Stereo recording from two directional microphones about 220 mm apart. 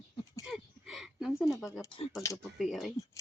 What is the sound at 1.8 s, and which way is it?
Speech, 20° left (ahead or behind).